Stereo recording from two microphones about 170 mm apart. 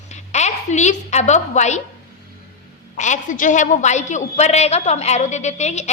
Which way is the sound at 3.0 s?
45° left (ahead or behind).